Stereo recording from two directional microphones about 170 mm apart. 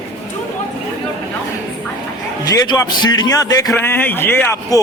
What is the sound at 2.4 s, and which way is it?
A man's voice, 25° left (ahead or behind).